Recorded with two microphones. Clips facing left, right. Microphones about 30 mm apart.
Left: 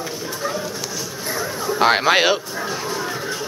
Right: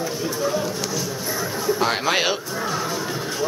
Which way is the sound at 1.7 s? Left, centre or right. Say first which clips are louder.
Left 8 dB; left.